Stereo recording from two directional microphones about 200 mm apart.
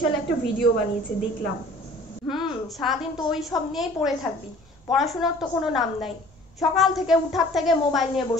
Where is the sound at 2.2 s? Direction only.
Centre (ahead or behind).